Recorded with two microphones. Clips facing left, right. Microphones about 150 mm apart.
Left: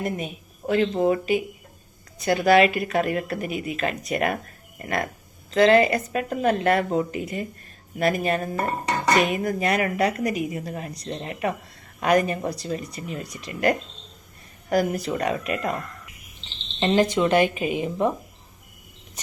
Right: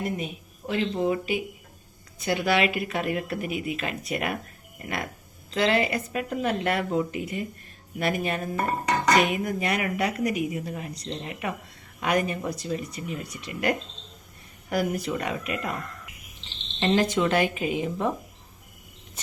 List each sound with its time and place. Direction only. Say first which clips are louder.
0.7 s speech: left 5 dB; 50° left (ahead or behind)
5.5 s a woman's voice: left 7 dB; 45° left (ahead or behind)
16.8 s a woman's voice: left 3 dB; 20° left (ahead or behind)